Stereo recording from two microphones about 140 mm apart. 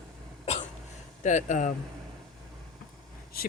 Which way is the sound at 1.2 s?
65° left (ahead or behind).